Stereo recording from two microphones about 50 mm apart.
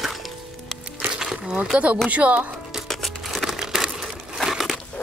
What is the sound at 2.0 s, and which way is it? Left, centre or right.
Speech, right.